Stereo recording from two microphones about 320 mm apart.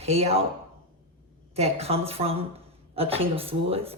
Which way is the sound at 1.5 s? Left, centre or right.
Centre.